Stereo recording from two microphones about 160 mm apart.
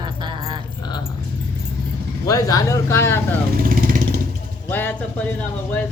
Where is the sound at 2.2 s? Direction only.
20° left (ahead or behind).